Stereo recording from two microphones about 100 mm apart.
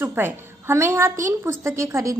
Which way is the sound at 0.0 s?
20° right (ahead or behind).